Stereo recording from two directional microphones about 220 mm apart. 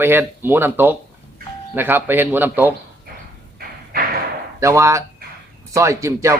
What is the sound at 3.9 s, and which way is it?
Thump, 45° right (ahead or behind).